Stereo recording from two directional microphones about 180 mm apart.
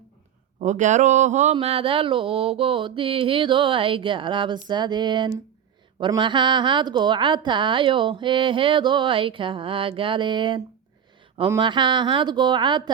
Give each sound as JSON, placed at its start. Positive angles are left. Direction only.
{"t": 0.6, "sound": "mantra", "side_deg": -40}
{"t": 1.5, "sound": "a woman's voice", "side_deg": -30}